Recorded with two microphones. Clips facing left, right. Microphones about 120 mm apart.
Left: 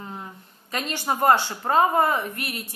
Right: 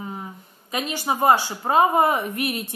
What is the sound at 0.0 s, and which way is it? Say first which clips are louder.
Speech: right 3 dB; 10° right (ahead or behind).